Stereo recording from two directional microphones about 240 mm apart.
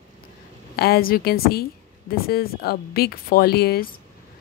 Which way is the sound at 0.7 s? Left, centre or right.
Left.